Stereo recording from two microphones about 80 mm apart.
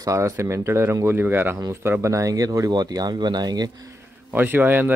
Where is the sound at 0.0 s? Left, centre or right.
Right.